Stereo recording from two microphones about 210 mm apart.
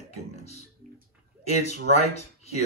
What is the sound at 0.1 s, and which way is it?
Music, 30° left (ahead or behind).